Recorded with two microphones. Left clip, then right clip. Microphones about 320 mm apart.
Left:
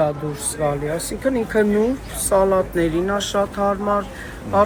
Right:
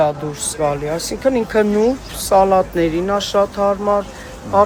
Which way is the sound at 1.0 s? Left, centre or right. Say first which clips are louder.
Right 5 dB; right.